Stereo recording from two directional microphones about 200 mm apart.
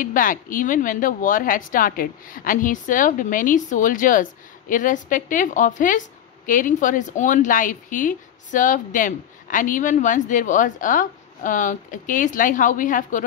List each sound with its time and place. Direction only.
0.0 s speech: 45° left (ahead or behind)